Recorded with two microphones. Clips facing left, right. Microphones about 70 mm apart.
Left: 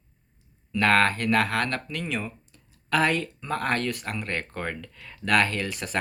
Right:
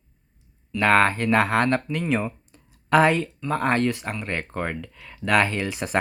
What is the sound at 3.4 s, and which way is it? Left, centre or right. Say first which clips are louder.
Speech: right 5 dB; centre.